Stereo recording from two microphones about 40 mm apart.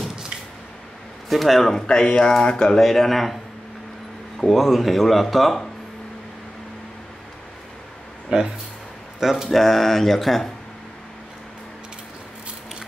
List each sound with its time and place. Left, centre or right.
1.3 s speech: centre
1.9 s speech: left
2.9 s speech: centre
4.6 s speech: centre
8.3 s speech: right
9.2 s speech: centre
9.5 s speech: centre